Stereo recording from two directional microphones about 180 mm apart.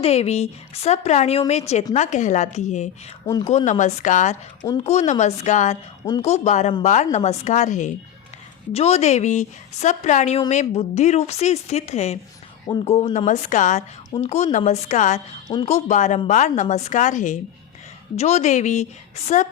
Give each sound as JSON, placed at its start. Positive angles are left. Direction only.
{"t": 0.0, "sound": "a woman's voice", "side_deg": 35}